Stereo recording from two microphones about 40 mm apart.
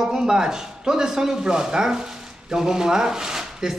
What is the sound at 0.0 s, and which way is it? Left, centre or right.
A man's voice, centre.